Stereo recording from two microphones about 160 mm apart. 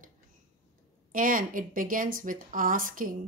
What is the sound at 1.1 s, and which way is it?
Speech, 60° right (ahead or behind).